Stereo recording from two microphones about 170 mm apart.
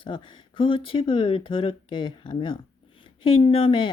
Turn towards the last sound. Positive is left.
turn(degrees=30)  # may be behind; listen again after turning